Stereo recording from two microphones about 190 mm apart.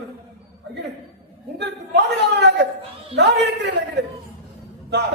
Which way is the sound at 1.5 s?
65° right (ahead or behind).